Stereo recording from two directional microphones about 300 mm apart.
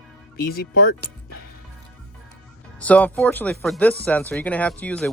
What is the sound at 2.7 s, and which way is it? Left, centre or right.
Speech, centre.